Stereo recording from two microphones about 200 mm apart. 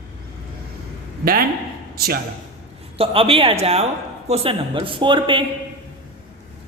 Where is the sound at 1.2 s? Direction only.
45° right (ahead or behind).